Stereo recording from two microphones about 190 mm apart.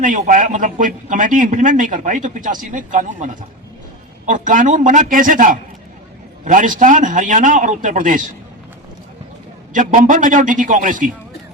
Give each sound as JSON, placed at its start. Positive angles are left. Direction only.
{"t": 0.0, "sound": "a man's voice", "side_deg": -45}
{"t": 4.3, "sound": "a man's voice", "side_deg": -45}
{"t": 9.7, "sound": "a man's voice", "side_deg": -40}